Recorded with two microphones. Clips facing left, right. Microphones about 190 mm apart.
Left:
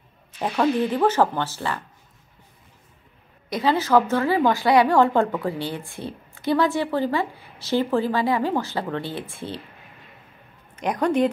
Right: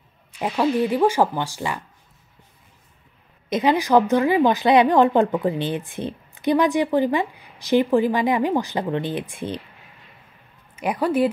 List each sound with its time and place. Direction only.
0.3 s a woman's voice: 10° right (ahead or behind)
3.4 s a woman's voice: 20° right (ahead or behind)
10.8 s a woman's voice: 5° right (ahead or behind)